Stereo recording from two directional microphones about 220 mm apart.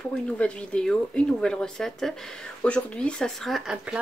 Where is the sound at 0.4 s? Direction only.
5° left (ahead or behind).